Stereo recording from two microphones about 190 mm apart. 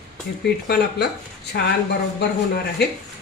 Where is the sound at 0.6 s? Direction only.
55° left (ahead or behind).